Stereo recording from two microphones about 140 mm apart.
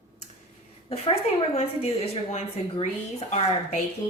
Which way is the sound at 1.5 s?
50° left (ahead or behind).